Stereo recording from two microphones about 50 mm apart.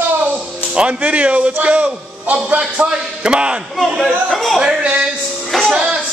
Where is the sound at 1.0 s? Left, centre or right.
Right.